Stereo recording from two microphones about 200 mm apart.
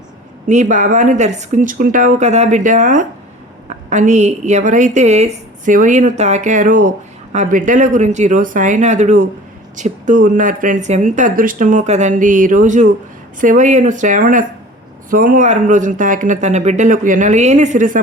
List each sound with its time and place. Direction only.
0.4 s a woman's voice: 35° right (ahead or behind)